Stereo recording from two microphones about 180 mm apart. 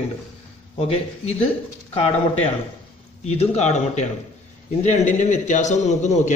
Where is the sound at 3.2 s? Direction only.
35° left (ahead or behind).